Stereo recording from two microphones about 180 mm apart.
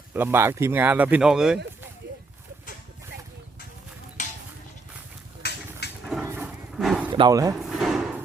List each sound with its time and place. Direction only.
0.1 s speech: 10° right (ahead or behind)
4.2 s a sound: 40° left (ahead or behind)
5.4 s a sound: 65° left (ahead or behind)
6.2 s dog: 5° right (ahead or behind)
7.1 s speech: 25° right (ahead or behind)
7.6 s drawer open or close: centre (ahead or behind)